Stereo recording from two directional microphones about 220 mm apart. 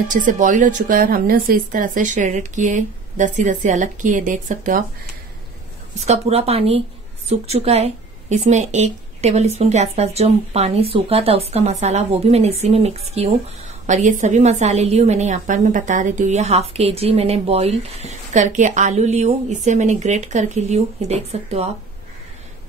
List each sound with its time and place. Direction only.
0.1 s a woman's voice: 35° right (ahead or behind)
5.9 s a woman's voice: 30° right (ahead or behind)